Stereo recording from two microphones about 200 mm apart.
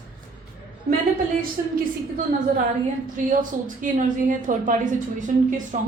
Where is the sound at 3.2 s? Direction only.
40° right (ahead or behind).